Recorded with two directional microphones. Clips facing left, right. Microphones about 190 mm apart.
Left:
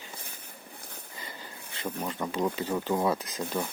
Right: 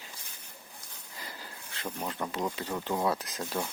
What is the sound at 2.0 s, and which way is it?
Speech, centre (ahead or behind).